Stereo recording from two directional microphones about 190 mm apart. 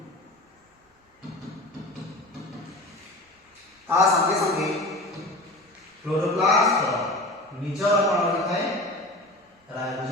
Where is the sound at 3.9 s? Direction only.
15° right (ahead or behind).